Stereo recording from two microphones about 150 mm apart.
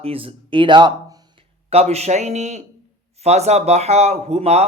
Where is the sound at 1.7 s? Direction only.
45° right (ahead or behind).